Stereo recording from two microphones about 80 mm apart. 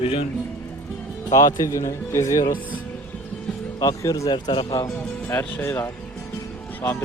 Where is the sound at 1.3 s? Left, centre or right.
Left.